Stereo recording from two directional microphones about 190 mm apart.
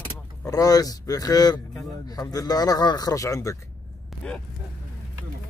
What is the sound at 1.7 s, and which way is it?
Speech, centre (ahead or behind).